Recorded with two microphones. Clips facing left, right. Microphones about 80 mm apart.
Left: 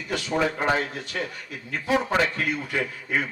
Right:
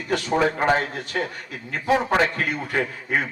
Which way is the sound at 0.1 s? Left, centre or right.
Right.